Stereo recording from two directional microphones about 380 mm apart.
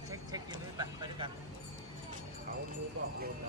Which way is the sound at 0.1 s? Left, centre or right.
Centre.